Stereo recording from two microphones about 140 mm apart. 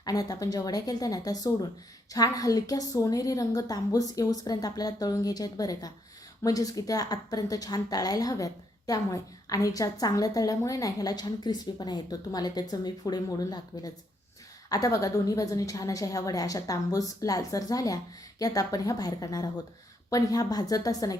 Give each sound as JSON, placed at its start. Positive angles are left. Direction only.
{"t": 0.0, "sound": "a woman's voice", "side_deg": 25}